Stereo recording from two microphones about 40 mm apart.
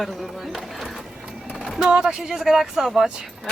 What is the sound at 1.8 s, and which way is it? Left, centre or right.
Speech, right.